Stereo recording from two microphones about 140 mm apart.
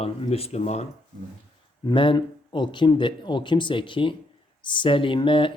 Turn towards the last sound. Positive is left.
turn(degrees=35)  # may be behind; listen again after turning